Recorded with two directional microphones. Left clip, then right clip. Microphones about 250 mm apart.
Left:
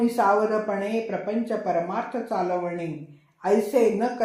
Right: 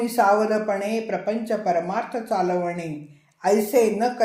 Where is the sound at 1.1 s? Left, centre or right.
Right.